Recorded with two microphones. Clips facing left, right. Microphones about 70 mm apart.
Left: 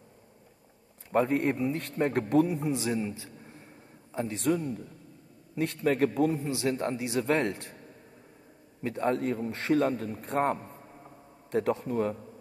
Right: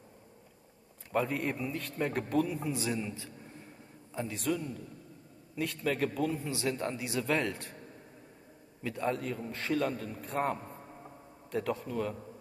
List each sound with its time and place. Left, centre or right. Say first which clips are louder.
1.1 s a man's voice: left 6 dB; left
8.8 s a man's voice: left 5 dB; left